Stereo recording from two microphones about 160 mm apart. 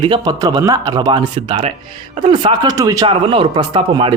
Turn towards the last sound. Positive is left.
turn(degrees=-30)  # may be behind; listen again after turning